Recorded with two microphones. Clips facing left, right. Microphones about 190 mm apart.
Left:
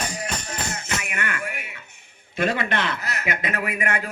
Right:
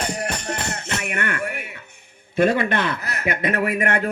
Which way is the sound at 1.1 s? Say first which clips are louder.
Right 6 dB; 60° right (ahead or behind).